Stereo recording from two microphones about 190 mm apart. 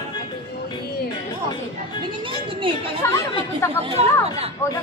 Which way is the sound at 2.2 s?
25° right (ahead or behind).